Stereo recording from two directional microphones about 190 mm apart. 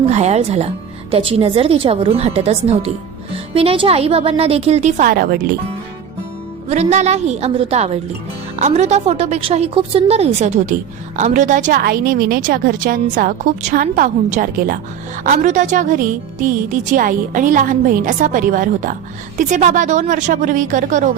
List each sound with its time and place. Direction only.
0.0 s a woman's voice: 35° right (ahead or behind)
6.7 s a woman's voice: 35° right (ahead or behind)